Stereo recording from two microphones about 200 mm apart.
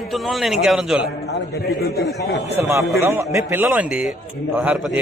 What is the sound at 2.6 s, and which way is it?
A man's voice, 15° right (ahead or behind).